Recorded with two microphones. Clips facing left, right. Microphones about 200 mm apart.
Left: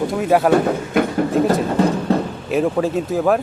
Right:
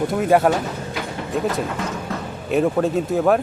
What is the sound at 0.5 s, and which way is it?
Speech, 55° left (ahead or behind).